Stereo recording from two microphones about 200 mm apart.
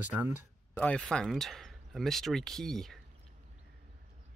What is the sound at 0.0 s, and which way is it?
Speech, 10° right (ahead or behind).